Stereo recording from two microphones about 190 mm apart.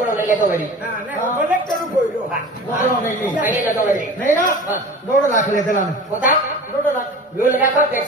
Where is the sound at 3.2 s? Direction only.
10° right (ahead or behind).